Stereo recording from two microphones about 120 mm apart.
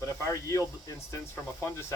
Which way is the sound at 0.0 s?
25° left (ahead or behind).